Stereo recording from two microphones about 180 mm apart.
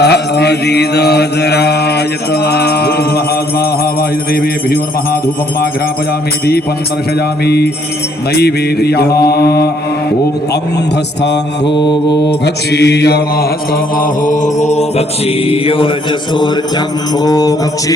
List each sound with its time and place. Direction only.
0.0 s mantra: 65° left (ahead or behind)
7.4 s mantra: 65° left (ahead or behind)
11.6 s music: 25° left (ahead or behind)
12.3 s mantra: 70° left (ahead or behind)
13.9 s mantra: 50° left (ahead or behind); by 15.9 s 30° left (ahead or behind)
16.3 s music: 25° left (ahead or behind)